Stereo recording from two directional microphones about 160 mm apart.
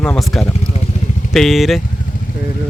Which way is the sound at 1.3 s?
Centre (ahead or behind).